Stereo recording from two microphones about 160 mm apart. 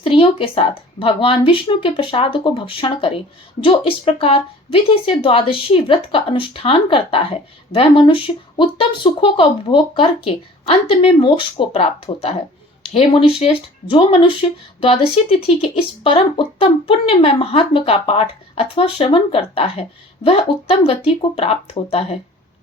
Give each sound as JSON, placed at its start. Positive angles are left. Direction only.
{"t": 0.0, "sound": "speech", "side_deg": 35}